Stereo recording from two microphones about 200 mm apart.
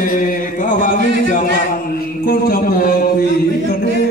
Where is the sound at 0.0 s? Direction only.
40° left (ahead or behind).